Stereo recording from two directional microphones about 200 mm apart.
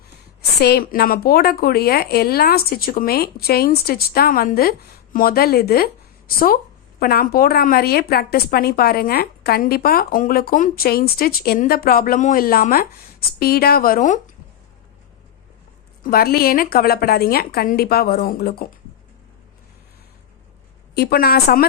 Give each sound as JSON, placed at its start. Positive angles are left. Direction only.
{"t": 0.6, "sound": "speech", "side_deg": 50}
{"t": 16.0, "sound": "speech", "side_deg": 50}
{"t": 20.9, "sound": "speech", "side_deg": 50}